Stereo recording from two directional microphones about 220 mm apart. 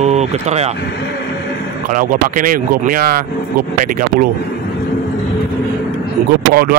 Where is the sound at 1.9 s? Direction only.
40° right (ahead or behind).